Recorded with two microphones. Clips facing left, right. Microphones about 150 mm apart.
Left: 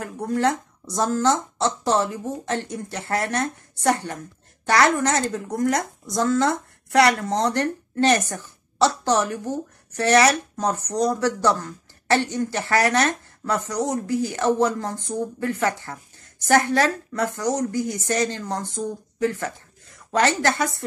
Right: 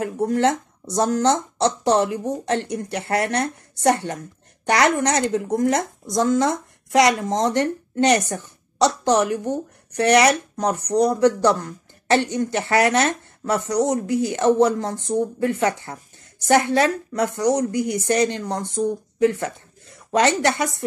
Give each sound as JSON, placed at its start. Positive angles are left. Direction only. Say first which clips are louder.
{"t": 0.0, "sound": "speech", "louder": "right 3 dB", "side_deg": -20}
{"t": 4.6, "sound": "a woman's voice", "louder": "right 1 dB", "side_deg": -20}